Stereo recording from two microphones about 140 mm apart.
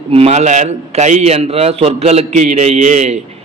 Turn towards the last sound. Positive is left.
turn(degrees=-55)  # may be behind; listen again after turning